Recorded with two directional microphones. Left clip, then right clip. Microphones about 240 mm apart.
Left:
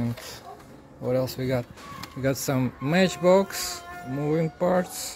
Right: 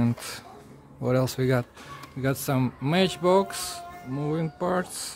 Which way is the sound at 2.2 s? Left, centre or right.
Centre.